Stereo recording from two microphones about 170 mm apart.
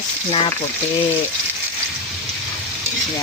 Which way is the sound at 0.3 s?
35° left (ahead or behind).